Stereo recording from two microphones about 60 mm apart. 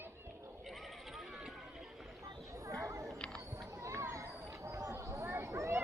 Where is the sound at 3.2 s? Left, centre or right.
Centre.